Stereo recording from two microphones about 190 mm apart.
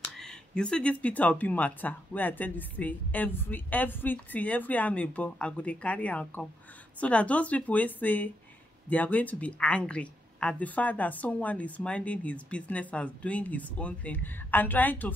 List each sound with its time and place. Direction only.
0.2 s speech: 5° left (ahead or behind)